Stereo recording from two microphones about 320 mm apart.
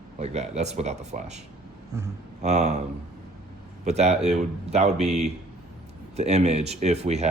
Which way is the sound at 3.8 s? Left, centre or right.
Right.